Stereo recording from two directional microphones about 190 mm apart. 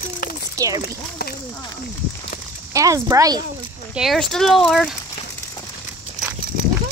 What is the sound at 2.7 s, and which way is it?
Speech, 15° right (ahead or behind).